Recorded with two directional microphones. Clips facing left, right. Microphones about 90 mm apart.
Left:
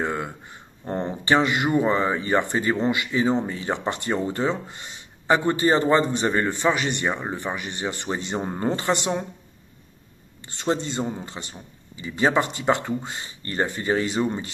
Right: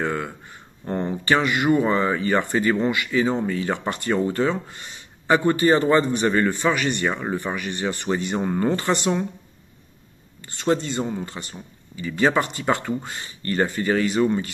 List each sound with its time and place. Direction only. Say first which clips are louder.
0.0 s a sound: right 1 dB; 15° left (ahead or behind)
0.8 s speech: right 1 dB; 20° left (ahead or behind)
10.4 s speech: right 3 dB; 20° left (ahead or behind)